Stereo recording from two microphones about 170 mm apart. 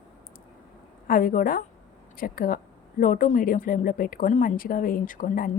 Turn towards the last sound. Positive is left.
turn(degrees=55)  # may be behind; listen again after turning